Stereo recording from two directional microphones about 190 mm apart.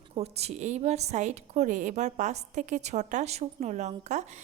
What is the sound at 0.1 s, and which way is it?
A woman's voice, 35° right (ahead or behind).